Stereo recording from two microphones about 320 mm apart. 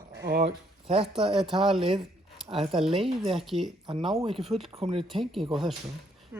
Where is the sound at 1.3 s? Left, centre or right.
Centre.